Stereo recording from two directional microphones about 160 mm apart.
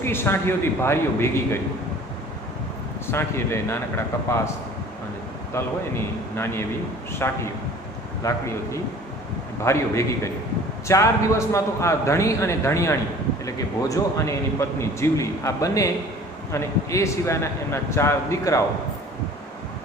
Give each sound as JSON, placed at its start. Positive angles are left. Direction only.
{"t": 0.0, "sound": "speech", "side_deg": 15}
{"t": 3.1, "sound": "speech", "side_deg": 15}
{"t": 5.6, "sound": "speech", "side_deg": 15}